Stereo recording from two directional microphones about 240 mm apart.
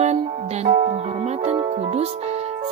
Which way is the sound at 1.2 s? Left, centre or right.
Right.